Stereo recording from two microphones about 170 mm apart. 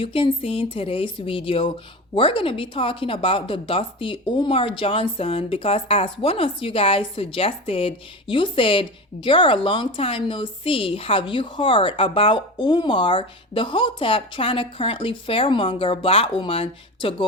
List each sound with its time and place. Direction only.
0.0 s speech: 30° left (ahead or behind)